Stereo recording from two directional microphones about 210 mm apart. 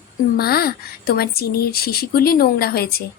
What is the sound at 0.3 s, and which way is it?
A woman's voice, 45° left (ahead or behind).